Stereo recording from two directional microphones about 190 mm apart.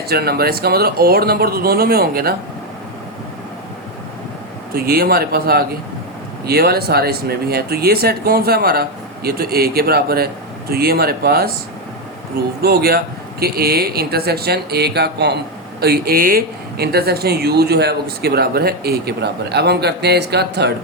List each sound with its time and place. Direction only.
0.1 s speech: 55° right (ahead or behind)
4.7 s speech: 55° right (ahead or behind)
12.6 s speech: 55° right (ahead or behind)